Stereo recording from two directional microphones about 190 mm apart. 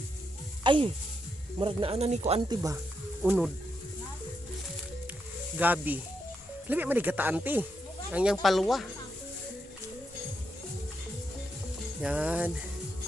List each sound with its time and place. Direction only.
0.6 s speech: 25° right (ahead or behind)
2.5 s speech: 15° right (ahead or behind)
5.5 s speech: 10° right (ahead or behind)
12.0 s speech: 5° right (ahead or behind)